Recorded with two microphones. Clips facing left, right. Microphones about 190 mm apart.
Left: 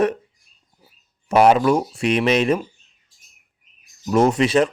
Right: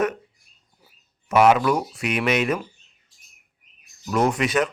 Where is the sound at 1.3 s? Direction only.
30° left (ahead or behind).